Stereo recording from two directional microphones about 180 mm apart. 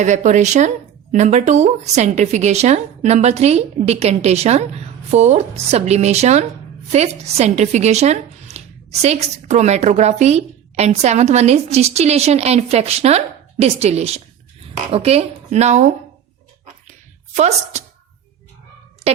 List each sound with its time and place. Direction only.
0.0 s a woman's voice: 40° right (ahead or behind)
17.3 s a woman's voice: 40° right (ahead or behind)